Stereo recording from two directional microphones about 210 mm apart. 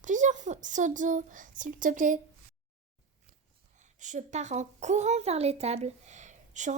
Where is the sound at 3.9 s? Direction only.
35° right (ahead or behind).